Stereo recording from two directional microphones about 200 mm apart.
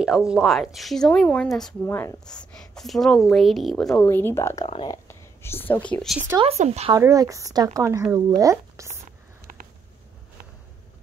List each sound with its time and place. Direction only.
0.0 s speech: 5° right (ahead or behind)
6.4 s speech: 35° right (ahead or behind)
6.9 s speech: 15° right (ahead or behind)